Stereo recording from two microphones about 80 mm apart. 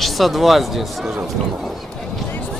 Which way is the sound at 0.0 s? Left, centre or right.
Centre.